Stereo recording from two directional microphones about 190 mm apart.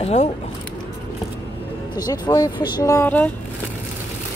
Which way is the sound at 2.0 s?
20° left (ahead or behind).